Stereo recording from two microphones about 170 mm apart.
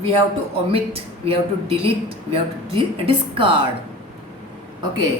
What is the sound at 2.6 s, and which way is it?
Speech, 30° right (ahead or behind).